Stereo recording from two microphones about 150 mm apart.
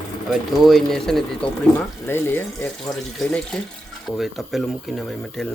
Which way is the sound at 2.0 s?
15° left (ahead or behind).